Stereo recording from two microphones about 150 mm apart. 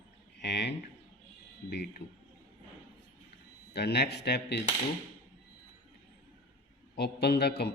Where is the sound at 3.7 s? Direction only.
90° left.